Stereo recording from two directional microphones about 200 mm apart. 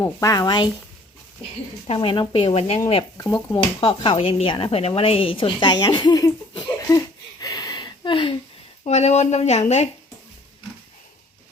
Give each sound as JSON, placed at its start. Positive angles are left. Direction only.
{"t": 0.0, "sound": "speech", "side_deg": 15}
{"t": 1.9, "sound": "speech", "side_deg": 25}